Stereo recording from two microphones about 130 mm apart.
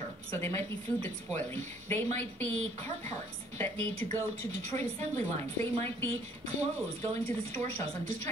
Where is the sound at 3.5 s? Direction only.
20° left (ahead or behind).